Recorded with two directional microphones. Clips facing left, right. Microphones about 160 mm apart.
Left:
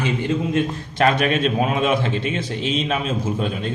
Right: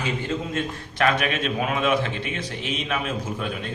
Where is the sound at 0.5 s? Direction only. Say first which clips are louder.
Left 7 dB; 30° left (ahead or behind).